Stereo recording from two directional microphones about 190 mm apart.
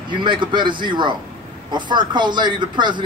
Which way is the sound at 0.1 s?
25° right (ahead or behind).